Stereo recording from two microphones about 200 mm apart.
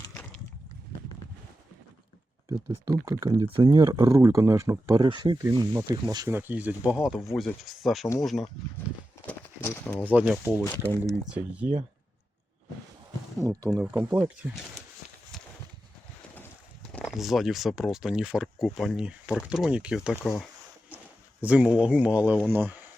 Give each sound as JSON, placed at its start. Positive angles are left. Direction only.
{"t": 2.5, "sound": "speech", "side_deg": -15}
{"t": 9.2, "sound": "horse", "side_deg": 10}
{"t": 10.1, "sound": "speech", "side_deg": -5}
{"t": 10.6, "sound": "speech", "side_deg": 15}
{"t": 11.2, "sound": "speech", "side_deg": -5}
{"t": 13.5, "sound": "speech", "side_deg": 0}
{"t": 13.9, "sound": "speech", "side_deg": -10}
{"t": 16.9, "sound": "speech", "side_deg": 5}
{"t": 21.4, "sound": "speech", "side_deg": -5}